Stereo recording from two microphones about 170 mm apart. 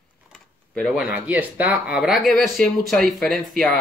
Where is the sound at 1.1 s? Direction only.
10° right (ahead or behind).